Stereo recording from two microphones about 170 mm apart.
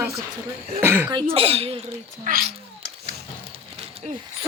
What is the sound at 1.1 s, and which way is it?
Speech, 35° right (ahead or behind).